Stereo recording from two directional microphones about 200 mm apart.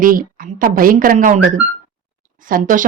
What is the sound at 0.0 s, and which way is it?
A woman's voice, 45° right (ahead or behind).